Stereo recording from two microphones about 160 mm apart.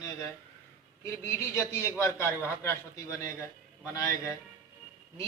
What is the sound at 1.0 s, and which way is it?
A man's voice, 15° left (ahead or behind).